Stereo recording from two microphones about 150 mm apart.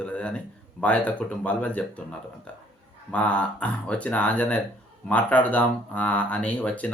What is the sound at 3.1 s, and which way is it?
Speech, 10° left (ahead or behind).